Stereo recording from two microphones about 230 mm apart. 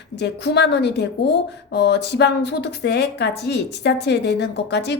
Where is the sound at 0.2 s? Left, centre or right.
Left.